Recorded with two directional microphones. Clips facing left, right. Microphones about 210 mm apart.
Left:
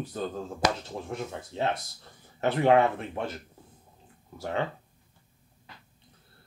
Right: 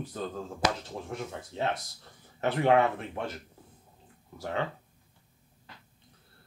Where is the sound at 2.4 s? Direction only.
25° left (ahead or behind).